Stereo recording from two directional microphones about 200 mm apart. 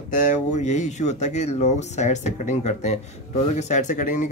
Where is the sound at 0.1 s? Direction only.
40° left (ahead or behind).